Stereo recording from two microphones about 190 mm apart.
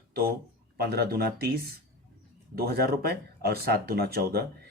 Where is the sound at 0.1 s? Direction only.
55° right (ahead or behind).